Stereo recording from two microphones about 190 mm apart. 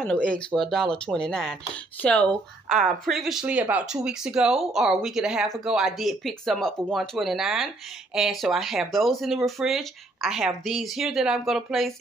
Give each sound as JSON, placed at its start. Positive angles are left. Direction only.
{"t": 0.0, "sound": "speech", "side_deg": 5}